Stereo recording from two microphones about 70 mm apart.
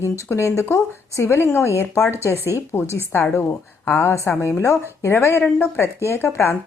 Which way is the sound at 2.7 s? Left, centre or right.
Left.